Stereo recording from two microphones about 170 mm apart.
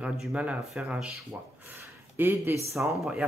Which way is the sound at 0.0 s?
5° right (ahead or behind).